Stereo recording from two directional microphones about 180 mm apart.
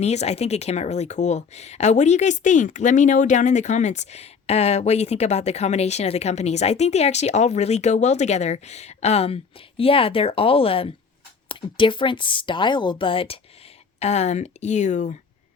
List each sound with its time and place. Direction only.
0.0 s speech: 35° left (ahead or behind)